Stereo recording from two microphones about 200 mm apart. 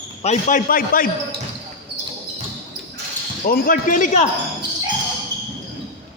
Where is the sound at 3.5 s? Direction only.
40° left (ahead or behind).